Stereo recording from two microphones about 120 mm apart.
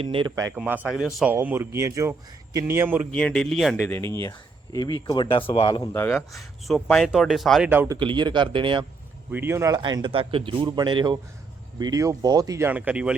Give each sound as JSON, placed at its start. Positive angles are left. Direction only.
{"t": 0.0, "sound": "speech", "side_deg": -50}
{"t": 0.3, "sound": "speech", "side_deg": -30}
{"t": 0.5, "sound": "speech", "side_deg": -10}
{"t": 3.1, "sound": "speech", "side_deg": 10}
{"t": 3.8, "sound": "speech", "side_deg": 20}
{"t": 4.3, "sound": "speech", "side_deg": 35}
{"t": 5.9, "sound": "speech", "side_deg": 20}
{"t": 6.1, "sound": "speech", "side_deg": 0}
{"t": 7.9, "sound": "speech", "side_deg": -40}
{"t": 9.3, "sound": "speech", "side_deg": -20}
{"t": 9.7, "sound": "speech", "side_deg": -40}